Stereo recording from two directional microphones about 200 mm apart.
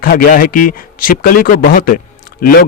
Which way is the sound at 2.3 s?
50° left (ahead or behind).